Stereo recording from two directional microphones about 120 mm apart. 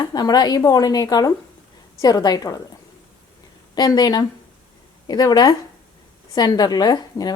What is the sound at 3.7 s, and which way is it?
A woman's voice, 35° left (ahead or behind).